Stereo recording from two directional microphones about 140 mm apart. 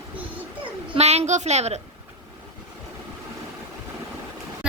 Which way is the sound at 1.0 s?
50° right (ahead or behind).